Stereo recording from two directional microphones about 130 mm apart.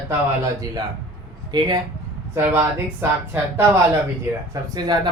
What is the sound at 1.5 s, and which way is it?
Speech, 30° right (ahead or behind).